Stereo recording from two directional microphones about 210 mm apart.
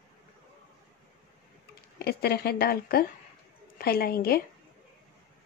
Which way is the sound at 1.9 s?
50° left (ahead or behind).